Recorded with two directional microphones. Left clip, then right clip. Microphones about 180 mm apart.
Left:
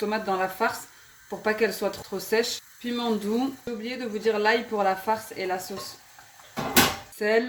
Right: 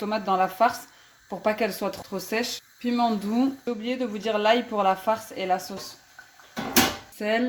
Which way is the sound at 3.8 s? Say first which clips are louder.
Left 2 dB; 30° right (ahead or behind).